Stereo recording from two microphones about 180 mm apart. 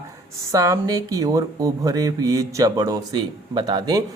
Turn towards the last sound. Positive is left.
turn(degrees=-20)  # may be behind; listen again after turning